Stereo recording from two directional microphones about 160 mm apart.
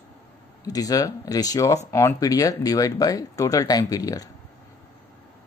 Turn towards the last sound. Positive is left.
turn(degrees=20)  # may be behind; listen again after turning